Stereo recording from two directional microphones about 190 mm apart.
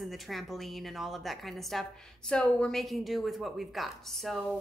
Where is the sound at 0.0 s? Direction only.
Centre (ahead or behind).